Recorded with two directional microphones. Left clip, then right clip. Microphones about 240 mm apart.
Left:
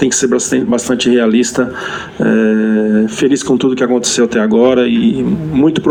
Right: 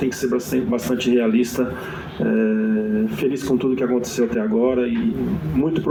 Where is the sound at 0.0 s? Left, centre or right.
Left.